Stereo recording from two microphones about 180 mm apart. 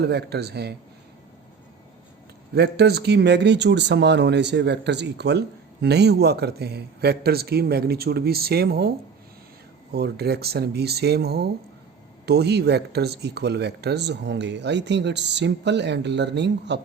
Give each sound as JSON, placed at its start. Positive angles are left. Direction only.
{"t": 0.0, "sound": "speech", "side_deg": -65}
{"t": 2.6, "sound": "speech", "side_deg": -65}
{"t": 9.9, "sound": "speech", "side_deg": -65}